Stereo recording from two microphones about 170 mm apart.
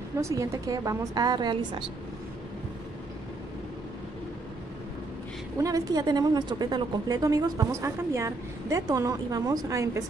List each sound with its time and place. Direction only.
0.2 s a woman's voice: 15° right (ahead or behind)
5.6 s a woman's voice: 20° right (ahead or behind)